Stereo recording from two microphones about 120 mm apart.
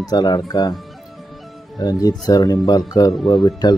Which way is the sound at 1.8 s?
30° left (ahead or behind).